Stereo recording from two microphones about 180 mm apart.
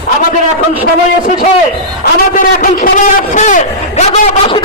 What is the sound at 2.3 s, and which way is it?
A man's voice, 45° left (ahead or behind).